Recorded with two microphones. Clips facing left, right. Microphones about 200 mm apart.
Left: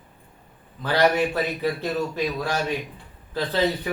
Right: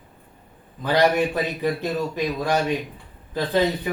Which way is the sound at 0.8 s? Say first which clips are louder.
Right 1 dB; 15° right (ahead or behind).